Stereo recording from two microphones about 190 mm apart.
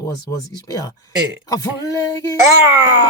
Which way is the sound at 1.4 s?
20° left (ahead or behind).